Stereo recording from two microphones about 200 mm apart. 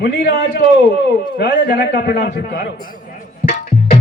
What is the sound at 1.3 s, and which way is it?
A man's voice, 55° left (ahead or behind).